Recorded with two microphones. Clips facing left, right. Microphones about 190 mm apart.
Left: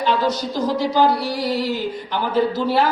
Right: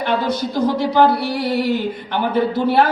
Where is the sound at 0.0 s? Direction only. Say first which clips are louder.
Even; 60° right (ahead or behind).